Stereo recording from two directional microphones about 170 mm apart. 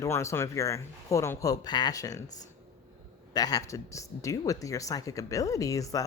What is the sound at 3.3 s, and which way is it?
Speech, 20° left (ahead or behind).